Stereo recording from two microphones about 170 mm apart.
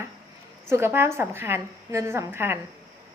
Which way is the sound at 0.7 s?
15° right (ahead or behind).